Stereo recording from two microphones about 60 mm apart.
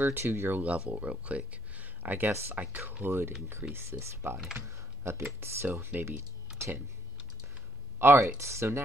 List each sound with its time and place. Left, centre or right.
0.0 s speech: right
0.7 s speech: centre
3.0 s speech: right
8.0 s speech: right